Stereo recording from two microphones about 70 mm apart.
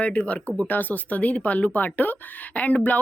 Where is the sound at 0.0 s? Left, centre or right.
Centre.